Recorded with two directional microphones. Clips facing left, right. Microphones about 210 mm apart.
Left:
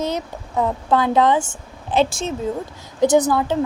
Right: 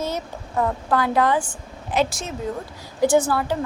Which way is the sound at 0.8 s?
20° left (ahead or behind).